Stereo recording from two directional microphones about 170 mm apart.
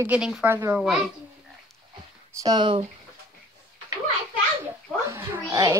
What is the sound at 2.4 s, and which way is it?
Speech, 25° right (ahead or behind).